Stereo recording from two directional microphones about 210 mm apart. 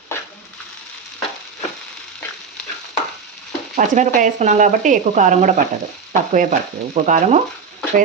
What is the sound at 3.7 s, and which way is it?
Stir, 40° right (ahead or behind).